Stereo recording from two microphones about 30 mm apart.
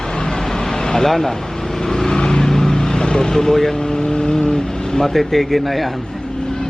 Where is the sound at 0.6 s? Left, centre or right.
Centre.